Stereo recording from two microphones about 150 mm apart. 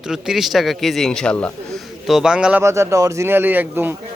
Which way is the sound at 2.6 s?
20° right (ahead or behind).